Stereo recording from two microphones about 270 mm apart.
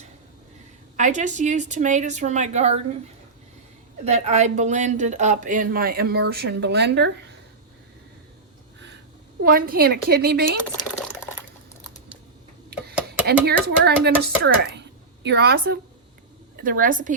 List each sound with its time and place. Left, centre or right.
0.9 s speech: right
4.0 s speech: right
9.4 s a woman's voice: right
13.4 s a woman's voice: right